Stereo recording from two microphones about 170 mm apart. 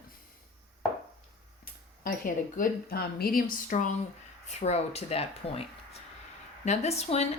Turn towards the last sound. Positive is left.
turn(degrees=40)  # may be behind; listen again after turning